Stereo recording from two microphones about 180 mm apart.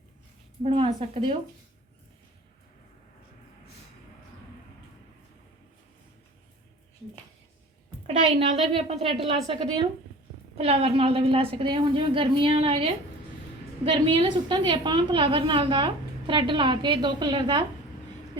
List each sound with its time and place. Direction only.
0.6 s a woman's voice: 35° right (ahead or behind)
8.2 s a woman's voice: 30° right (ahead or behind)
10.6 s a woman's voice: 35° right (ahead or behind)